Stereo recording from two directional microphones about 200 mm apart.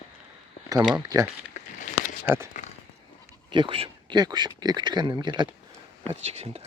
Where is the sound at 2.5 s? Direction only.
40° left (ahead or behind).